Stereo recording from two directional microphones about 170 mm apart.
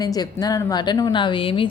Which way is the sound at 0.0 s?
20° left (ahead or behind).